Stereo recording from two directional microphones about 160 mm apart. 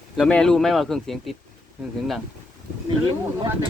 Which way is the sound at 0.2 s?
5° left (ahead or behind).